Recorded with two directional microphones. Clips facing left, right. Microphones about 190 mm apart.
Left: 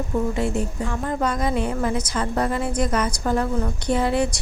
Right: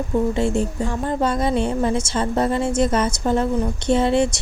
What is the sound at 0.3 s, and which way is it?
Speech, 25° right (ahead or behind).